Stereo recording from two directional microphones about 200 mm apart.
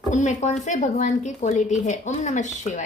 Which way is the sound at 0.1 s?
35° left (ahead or behind).